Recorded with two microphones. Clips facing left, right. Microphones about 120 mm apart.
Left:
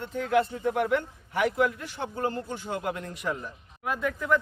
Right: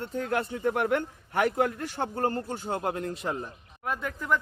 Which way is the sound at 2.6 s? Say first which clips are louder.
Right 2 dB; 35° right (ahead or behind).